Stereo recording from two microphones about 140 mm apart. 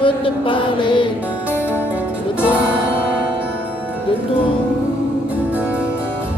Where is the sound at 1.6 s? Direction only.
10° right (ahead or behind).